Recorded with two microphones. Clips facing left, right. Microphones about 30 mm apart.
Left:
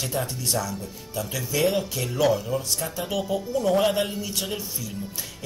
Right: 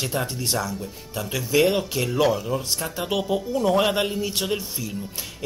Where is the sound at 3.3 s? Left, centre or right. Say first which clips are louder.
Right 1 dB; centre.